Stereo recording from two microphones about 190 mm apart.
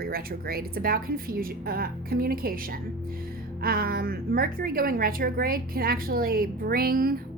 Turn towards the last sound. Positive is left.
turn(degrees=-50)  # may be behind; listen again after turning